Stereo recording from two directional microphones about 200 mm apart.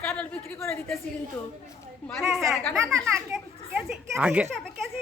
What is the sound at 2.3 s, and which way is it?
Speech, centre (ahead or behind).